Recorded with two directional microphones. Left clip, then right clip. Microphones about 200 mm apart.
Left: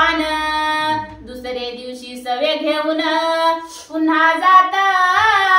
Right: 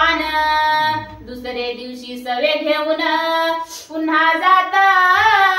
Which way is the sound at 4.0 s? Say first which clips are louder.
Left 1 dB; 25° left (ahead or behind).